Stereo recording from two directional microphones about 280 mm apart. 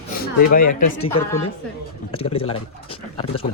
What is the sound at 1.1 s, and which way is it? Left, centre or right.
Speech, centre.